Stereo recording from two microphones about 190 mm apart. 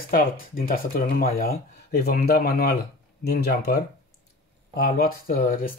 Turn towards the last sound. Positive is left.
turn(degrees=45)  # may be behind; listen again after turning